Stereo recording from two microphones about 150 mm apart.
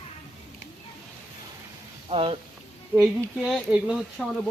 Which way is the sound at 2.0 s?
40° right (ahead or behind).